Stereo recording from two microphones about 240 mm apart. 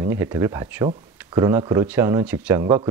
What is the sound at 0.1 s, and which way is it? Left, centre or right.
Speech, centre.